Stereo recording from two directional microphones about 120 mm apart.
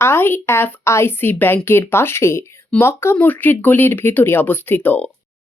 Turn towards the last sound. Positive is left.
turn(degrees=15)  # may be behind; listen again after turning